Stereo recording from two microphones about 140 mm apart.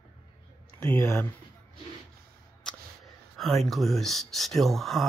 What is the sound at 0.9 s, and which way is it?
Speech, 20° left (ahead or behind).